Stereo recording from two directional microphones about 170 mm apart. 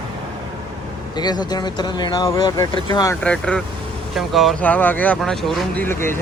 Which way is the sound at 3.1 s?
5° left (ahead or behind).